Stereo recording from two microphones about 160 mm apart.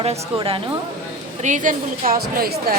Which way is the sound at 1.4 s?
50° right (ahead or behind).